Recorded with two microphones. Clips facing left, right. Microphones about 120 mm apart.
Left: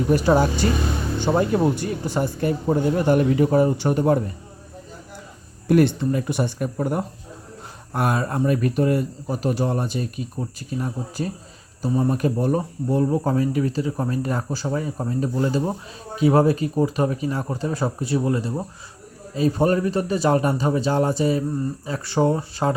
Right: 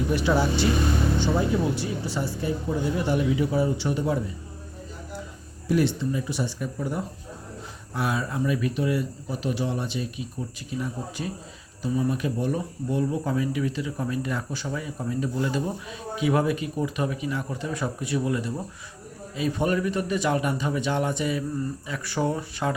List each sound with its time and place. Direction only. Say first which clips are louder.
0.1 s speech: left 6 dB; 45° left (ahead or behind)
1.2 s speech: left 9 dB; 55° left (ahead or behind)
5.6 s speech: left 6 dB; 55° left (ahead or behind); by 22.7 s 30° left (ahead or behind)